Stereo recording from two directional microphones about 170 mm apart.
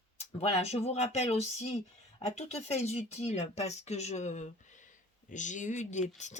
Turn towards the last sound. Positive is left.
turn(degrees=45)  # may be behind; listen again after turning